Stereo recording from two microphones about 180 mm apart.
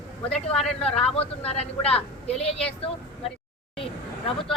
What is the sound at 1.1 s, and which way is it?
Speech, 35° left (ahead or behind).